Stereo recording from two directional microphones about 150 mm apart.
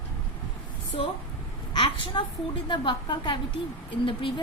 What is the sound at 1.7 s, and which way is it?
A woman's voice, 35° left (ahead or behind).